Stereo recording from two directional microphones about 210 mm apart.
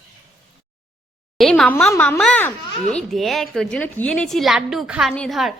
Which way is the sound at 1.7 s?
10° left (ahead or behind).